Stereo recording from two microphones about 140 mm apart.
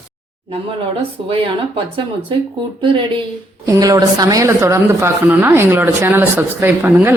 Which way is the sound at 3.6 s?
25° right (ahead or behind).